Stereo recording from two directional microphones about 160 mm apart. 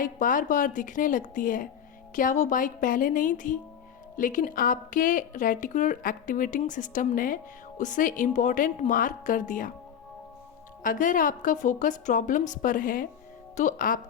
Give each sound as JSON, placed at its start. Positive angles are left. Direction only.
{"t": 0.0, "sound": "a woman's voice", "side_deg": 55}
{"t": 10.8, "sound": "a woman's voice", "side_deg": 55}